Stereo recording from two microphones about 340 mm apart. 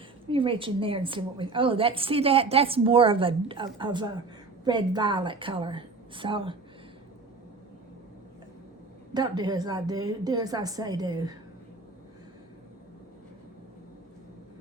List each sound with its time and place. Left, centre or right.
0.3 s a woman's voice: centre
9.1 s a woman's voice: centre